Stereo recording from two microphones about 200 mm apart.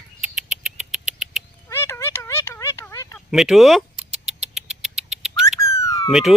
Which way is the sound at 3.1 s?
Centre (ahead or behind).